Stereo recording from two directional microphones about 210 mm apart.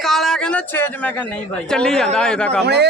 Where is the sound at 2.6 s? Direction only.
50° right (ahead or behind).